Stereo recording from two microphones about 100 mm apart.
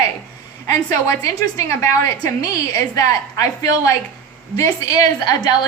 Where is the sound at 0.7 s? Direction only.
30° left (ahead or behind).